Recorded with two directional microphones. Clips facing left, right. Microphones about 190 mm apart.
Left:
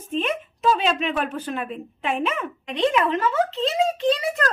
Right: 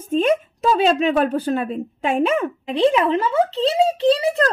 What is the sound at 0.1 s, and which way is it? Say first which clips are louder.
A woman's voice: right 8 dB; 40° right (ahead or behind).